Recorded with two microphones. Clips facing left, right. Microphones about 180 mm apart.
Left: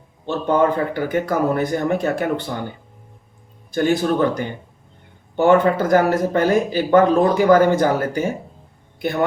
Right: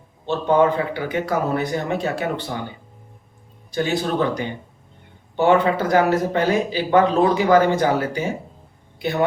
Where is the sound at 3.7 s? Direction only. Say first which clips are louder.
Left 3 dB; 50° left (ahead or behind).